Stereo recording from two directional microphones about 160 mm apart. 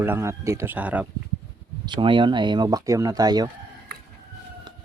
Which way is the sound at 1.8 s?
30° right (ahead or behind).